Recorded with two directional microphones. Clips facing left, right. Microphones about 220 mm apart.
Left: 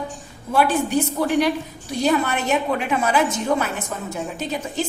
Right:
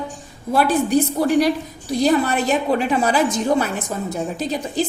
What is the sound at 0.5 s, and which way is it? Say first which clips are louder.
A woman's voice: right 2 dB; 40° right (ahead or behind).